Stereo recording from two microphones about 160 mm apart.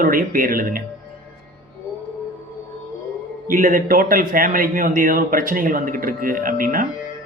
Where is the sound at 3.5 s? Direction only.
55° right (ahead or behind).